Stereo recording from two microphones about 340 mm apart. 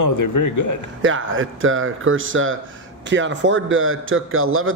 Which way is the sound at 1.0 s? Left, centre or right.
Right.